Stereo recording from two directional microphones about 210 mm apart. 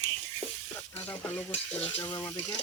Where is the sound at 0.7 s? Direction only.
10° left (ahead or behind).